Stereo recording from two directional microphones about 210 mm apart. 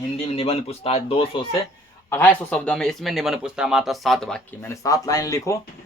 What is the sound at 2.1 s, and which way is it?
Speech, 10° left (ahead or behind).